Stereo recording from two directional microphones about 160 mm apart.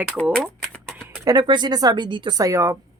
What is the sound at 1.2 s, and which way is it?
Speech, 25° right (ahead or behind).